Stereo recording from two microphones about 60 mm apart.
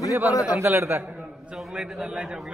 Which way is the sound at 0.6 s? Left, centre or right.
Right.